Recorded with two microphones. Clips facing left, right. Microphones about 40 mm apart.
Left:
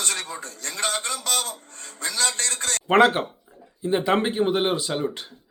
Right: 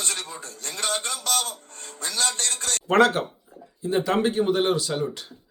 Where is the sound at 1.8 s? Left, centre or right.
Left.